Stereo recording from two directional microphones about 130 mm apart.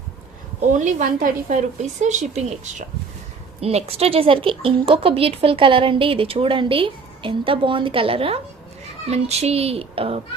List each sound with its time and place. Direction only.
0.7 s a woman's voice: 70° right (ahead or behind); by 8.4 s 45° right (ahead or behind)
9.0 s speech: 55° right (ahead or behind)